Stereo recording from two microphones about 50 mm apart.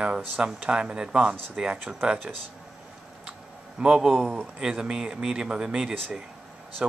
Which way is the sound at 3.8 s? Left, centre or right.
Centre.